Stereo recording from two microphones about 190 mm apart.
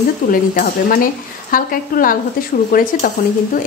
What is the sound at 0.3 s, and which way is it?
A woman's voice, 50° left (ahead or behind).